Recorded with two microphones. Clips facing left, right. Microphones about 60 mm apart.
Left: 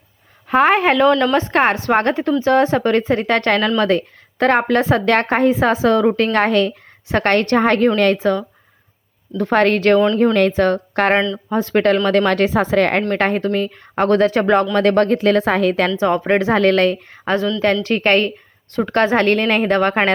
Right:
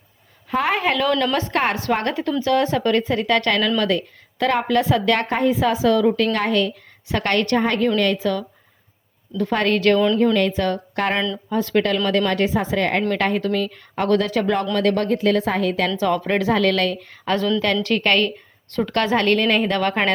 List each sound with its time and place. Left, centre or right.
0.4 s a woman's voice: left
1.1 s a woman's voice: left
9.4 s a woman's voice: left
11.4 s a woman's voice: left
12.0 s a woman's voice: left
13.1 s a woman's voice: left
16.0 s a woman's voice: left
18.3 s a woman's voice: centre
18.9 s speech: left